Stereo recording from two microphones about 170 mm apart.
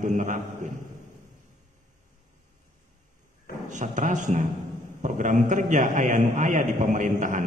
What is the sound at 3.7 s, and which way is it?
A man's voice, 45° right (ahead or behind).